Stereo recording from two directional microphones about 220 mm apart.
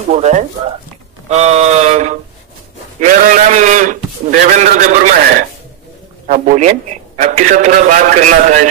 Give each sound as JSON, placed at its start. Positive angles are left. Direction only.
{"t": 0.1, "sound": "a man's voice", "side_deg": -30}